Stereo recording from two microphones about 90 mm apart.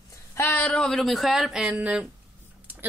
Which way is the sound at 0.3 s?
25° left (ahead or behind).